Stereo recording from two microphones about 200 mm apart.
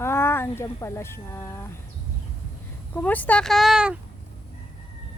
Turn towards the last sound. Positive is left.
turn(degrees=-5)  # may be behind; listen again after turning